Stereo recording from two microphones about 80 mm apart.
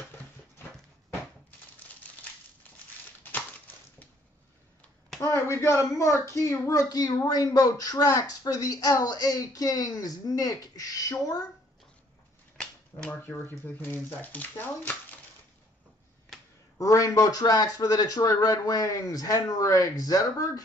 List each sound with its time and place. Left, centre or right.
5.2 s a woman's voice: left
6.9 s speech: left
13.1 s speech: left
16.7 s speech: left